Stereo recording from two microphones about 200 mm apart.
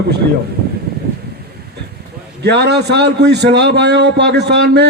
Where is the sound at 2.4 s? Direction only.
55° right (ahead or behind).